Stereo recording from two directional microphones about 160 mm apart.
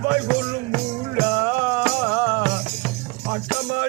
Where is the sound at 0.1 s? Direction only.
20° right (ahead or behind).